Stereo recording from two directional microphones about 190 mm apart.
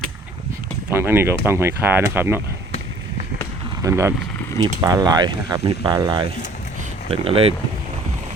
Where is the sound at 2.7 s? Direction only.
35° left (ahead or behind).